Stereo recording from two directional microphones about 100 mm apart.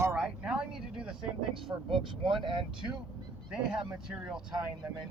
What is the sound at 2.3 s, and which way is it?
Speech, 55° right (ahead or behind).